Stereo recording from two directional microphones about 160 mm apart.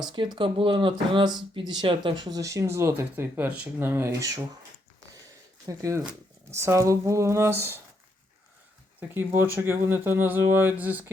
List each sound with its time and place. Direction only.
0.3 s speech: 35° right (ahead or behind)
5.6 s speech: 20° right (ahead or behind)
9.0 s speech: 15° right (ahead or behind)